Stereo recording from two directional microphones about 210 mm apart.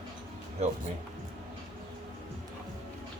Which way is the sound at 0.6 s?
30° right (ahead or behind).